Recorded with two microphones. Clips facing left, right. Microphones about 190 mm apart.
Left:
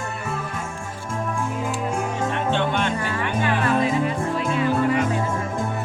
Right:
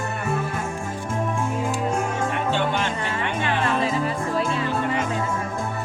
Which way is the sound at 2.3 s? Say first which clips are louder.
Left 2 dB; 5° right (ahead or behind).